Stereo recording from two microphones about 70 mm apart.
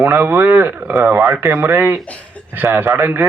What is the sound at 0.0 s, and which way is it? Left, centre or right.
A man's voice, right.